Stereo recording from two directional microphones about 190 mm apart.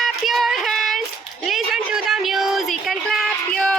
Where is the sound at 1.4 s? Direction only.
Centre (ahead or behind).